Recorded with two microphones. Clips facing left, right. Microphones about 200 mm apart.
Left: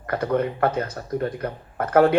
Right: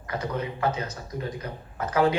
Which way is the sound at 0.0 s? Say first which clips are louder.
Left 8 dB; 55° left (ahead or behind).